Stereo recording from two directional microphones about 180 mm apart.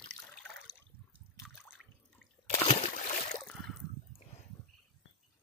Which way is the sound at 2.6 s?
40° left (ahead or behind).